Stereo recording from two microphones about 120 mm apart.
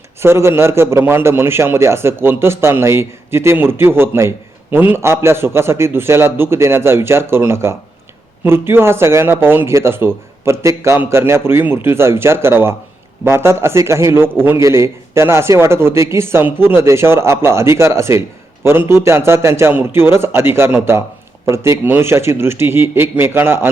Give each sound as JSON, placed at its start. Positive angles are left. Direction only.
{"t": 0.2, "sound": "a man's voice", "side_deg": -20}